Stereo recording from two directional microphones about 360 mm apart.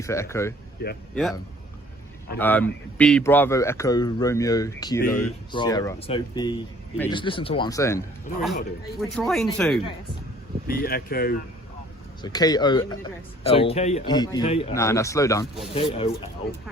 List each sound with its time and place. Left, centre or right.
0.0 s speech: centre
2.4 s speech: centre
10.8 s speech: left
12.2 s speech: centre